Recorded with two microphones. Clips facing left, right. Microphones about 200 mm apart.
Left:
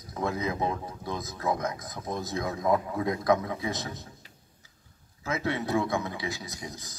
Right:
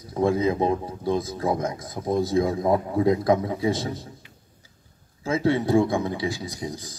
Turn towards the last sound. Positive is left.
turn(degrees=-30)  # may be behind; listen again after turning